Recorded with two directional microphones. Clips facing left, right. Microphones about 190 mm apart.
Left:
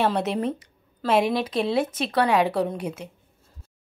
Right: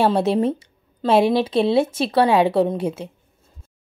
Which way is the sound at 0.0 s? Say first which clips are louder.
Right 6 dB; 30° right (ahead or behind).